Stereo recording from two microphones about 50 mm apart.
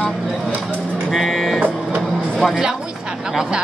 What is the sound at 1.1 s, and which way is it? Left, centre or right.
Speech, centre.